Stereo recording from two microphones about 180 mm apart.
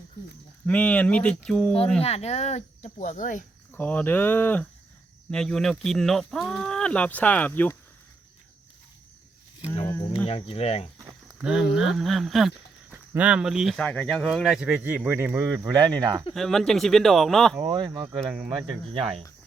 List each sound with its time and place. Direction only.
0.6 s speech: 5° left (ahead or behind)
2.0 s speech: 35° left (ahead or behind)
3.7 s speech: 10° left (ahead or behind)
9.8 s speech: 15° left (ahead or behind)
10.2 s speech: 35° left (ahead or behind)
11.4 s speech: 5° right (ahead or behind); by 16.2 s 20° right (ahead or behind)
16.3 s speech: centre (ahead or behind)
17.6 s speech: 25° right (ahead or behind)
18.1 s speech: 5° right (ahead or behind)
18.9 s cricket: 30° right (ahead or behind)